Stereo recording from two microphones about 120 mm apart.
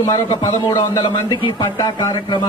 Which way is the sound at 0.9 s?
35° left (ahead or behind).